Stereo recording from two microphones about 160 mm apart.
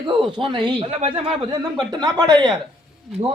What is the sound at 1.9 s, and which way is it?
Speech, 25° right (ahead or behind).